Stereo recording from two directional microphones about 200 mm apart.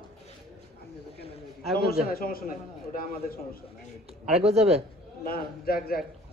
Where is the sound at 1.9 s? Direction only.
45° left (ahead or behind).